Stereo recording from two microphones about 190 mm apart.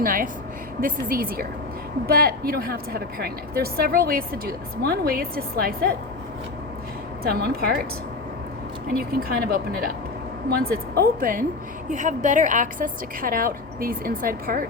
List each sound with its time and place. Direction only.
0.0 s a woman's voice: 45° right (ahead or behind)
7.3 s a woman's voice: 55° right (ahead or behind)
8.9 s a woman's voice: 50° right (ahead or behind)